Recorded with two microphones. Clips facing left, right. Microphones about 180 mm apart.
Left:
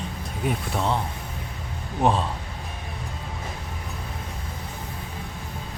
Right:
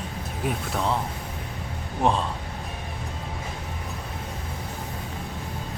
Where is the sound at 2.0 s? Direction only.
Centre (ahead or behind).